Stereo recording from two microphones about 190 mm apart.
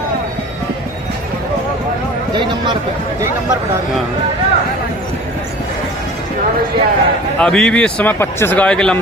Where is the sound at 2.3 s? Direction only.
25° right (ahead or behind).